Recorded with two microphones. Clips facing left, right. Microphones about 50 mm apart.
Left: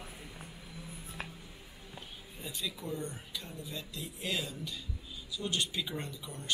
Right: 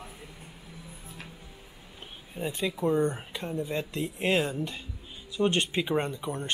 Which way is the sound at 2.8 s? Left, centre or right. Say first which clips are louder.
Right 17 dB; right.